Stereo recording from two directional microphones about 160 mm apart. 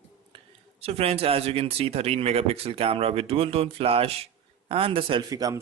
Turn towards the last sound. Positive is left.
turn(degrees=-20)  # may be behind; listen again after turning